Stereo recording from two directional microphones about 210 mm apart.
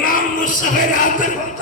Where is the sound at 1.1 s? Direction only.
35° left (ahead or behind).